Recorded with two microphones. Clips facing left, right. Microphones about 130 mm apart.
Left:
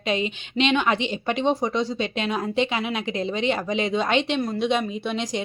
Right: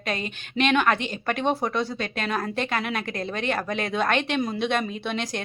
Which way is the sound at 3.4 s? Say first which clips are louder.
Left 2 dB; 50° right (ahead or behind).